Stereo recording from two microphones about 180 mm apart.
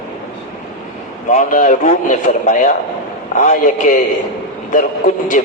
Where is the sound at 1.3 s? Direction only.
45° left (ahead or behind).